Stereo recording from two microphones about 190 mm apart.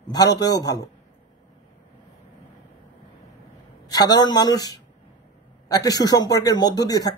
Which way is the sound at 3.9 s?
20° left (ahead or behind).